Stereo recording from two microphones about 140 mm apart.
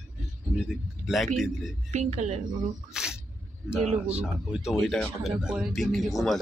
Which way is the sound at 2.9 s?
5° right (ahead or behind).